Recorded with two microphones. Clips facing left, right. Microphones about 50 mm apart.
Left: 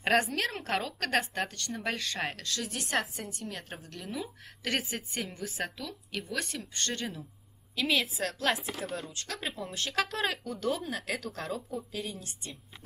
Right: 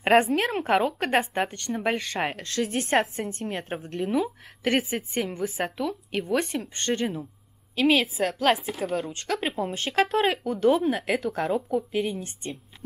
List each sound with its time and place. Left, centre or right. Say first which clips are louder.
0.0 s speech: right 7 dB; right